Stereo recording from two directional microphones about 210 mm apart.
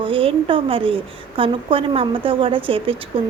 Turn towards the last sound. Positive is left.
turn(degrees=-25)  # may be behind; listen again after turning